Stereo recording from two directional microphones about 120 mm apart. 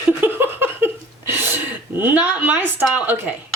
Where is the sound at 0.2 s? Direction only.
20° right (ahead or behind).